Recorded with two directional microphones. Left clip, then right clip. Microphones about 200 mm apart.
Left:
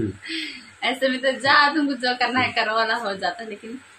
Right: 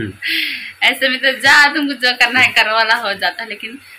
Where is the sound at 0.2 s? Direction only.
15° left (ahead or behind).